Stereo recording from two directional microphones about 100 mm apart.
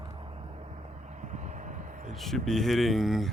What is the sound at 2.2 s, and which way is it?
Speech, 5° left (ahead or behind).